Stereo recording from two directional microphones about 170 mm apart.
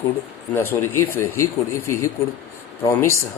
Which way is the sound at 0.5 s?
15° left (ahead or behind).